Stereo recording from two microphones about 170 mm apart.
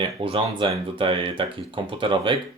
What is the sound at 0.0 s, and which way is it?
Speech, 30° right (ahead or behind).